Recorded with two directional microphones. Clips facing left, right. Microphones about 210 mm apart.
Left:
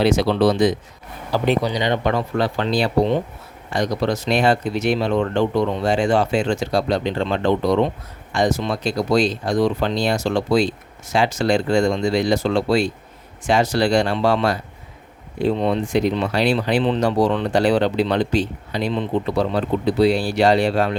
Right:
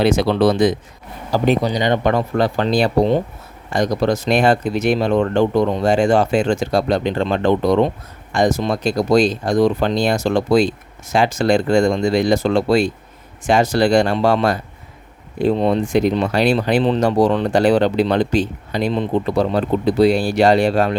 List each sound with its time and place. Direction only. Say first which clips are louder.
0.0 s speech: right 2 dB; 50° right (ahead or behind)